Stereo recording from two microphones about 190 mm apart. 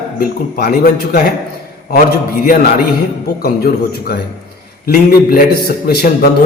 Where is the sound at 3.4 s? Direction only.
55° left (ahead or behind).